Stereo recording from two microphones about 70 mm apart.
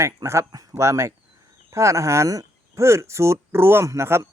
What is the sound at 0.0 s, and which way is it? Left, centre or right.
Speech, right.